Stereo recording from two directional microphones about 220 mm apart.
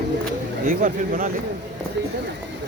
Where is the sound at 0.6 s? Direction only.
40° right (ahead or behind).